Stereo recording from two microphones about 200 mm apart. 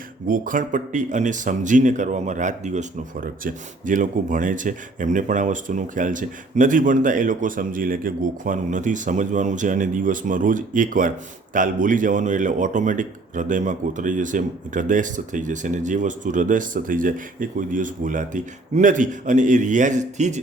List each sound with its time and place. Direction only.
0.3 s speech: 40° right (ahead or behind)